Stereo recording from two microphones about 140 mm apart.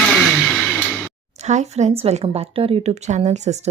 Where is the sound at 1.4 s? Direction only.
55° right (ahead or behind).